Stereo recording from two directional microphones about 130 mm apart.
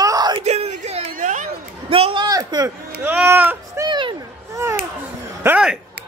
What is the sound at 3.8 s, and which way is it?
Speech, 35° right (ahead or behind).